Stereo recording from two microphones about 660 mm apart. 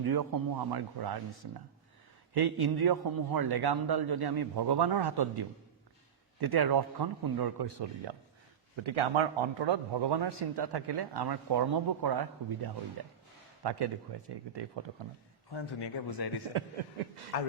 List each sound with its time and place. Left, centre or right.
0.0 s a man's voice: right
15.4 s speech: left
17.3 s a man's voice: left